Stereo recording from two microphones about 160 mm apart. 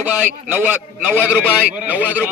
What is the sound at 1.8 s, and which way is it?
Speech, 10° right (ahead or behind).